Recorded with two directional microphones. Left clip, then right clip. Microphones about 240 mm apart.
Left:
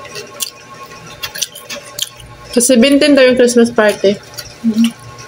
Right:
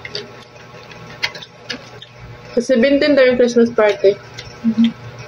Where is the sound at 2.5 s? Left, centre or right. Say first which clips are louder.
Left 4 dB; left.